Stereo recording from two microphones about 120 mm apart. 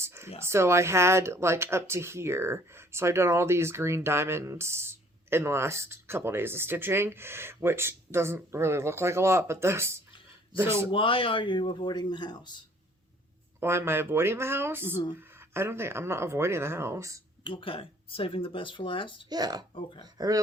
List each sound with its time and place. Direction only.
0.0 s a sound: 25° right (ahead or behind)
0.4 s speech: 20° right (ahead or behind)
10.9 s speech: 45° left (ahead or behind)
13.6 s speech: 20° right (ahead or behind)
17.4 s speech: 45° left (ahead or behind)
19.3 s speech: 35° right (ahead or behind)
19.7 s speech: 45° left (ahead or behind)
20.1 s speech: 30° right (ahead or behind)